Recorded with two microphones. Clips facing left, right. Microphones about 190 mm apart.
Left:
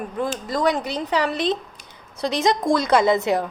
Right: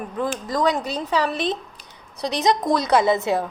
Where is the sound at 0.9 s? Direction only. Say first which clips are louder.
Even; centre (ahead or behind).